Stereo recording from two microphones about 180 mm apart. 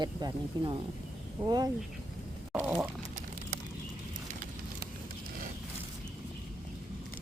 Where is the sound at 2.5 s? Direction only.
10° right (ahead or behind).